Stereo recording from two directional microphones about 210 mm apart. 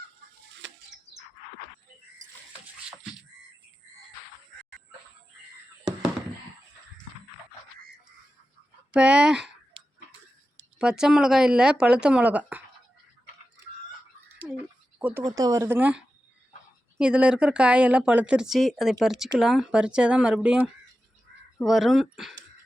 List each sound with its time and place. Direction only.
8.9 s speech: 5° right (ahead or behind)
9.7 s tick-tock: 25° right (ahead or behind)
10.8 s speech: 5° right (ahead or behind)
14.3 s frog: 10° right (ahead or behind)
14.9 s speech: 10° right (ahead or behind)